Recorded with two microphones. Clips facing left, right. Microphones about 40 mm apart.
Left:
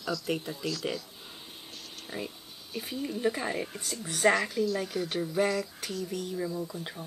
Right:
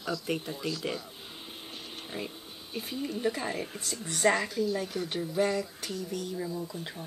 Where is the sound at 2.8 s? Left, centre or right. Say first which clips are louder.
Left 1 dB; centre.